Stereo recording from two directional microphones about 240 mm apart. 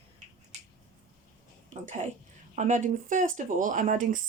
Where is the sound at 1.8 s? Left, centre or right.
Right.